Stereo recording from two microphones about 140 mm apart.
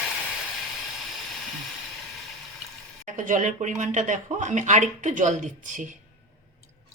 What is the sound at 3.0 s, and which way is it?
Speech, 65° right (ahead or behind).